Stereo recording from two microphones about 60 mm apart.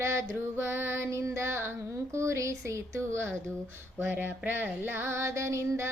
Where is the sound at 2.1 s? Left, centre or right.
Right.